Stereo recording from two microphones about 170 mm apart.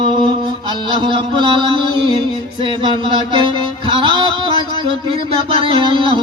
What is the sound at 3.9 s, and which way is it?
Music, 30° right (ahead or behind).